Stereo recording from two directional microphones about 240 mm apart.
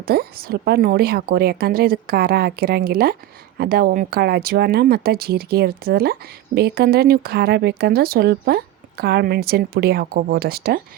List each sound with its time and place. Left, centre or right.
0.0 s speech: right